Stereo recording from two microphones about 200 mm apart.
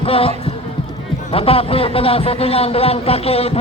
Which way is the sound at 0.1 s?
30° left (ahead or behind).